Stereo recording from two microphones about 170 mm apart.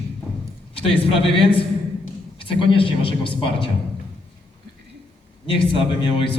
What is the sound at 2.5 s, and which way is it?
A man's voice, 30° left (ahead or behind).